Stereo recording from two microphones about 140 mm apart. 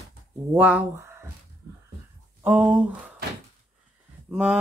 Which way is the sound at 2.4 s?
10° right (ahead or behind).